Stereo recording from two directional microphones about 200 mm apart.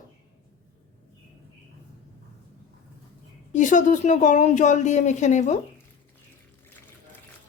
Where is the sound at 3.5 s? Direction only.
40° left (ahead or behind).